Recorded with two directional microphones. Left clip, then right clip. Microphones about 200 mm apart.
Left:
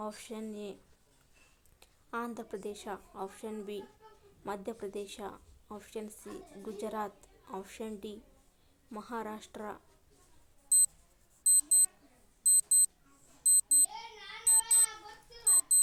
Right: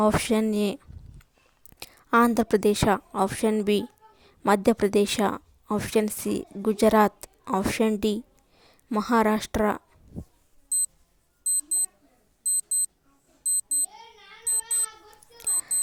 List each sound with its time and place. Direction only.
0.0 s a woman's voice: 50° right (ahead or behind)
1.8 s a woman's voice: 50° right (ahead or behind)
10.7 s alarm clock: centre (ahead or behind)
14.4 s a sound: centre (ahead or behind)
15.4 s music: centre (ahead or behind)